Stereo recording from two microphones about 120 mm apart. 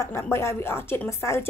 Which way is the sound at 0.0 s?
20° left (ahead or behind).